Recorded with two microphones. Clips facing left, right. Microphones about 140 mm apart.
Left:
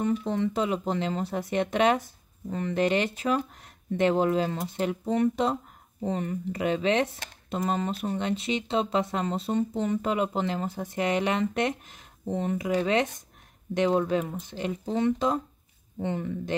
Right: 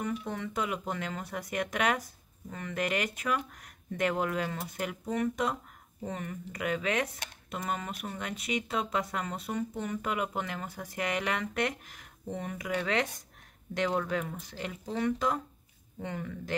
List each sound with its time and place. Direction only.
0.0 s speech: 30° left (ahead or behind)